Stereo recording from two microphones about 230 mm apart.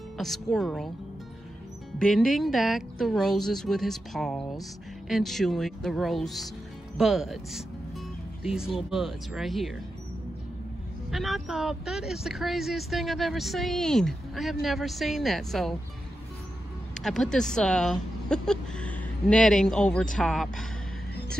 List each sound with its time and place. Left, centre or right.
0.2 s speech: centre
2.0 s speech: centre
11.1 s speech: centre
17.0 s speech: centre